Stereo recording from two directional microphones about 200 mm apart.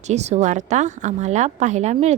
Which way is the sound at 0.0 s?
35° right (ahead or behind).